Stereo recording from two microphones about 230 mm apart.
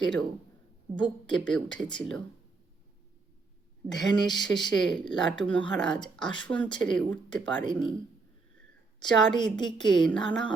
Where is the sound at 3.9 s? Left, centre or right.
Centre.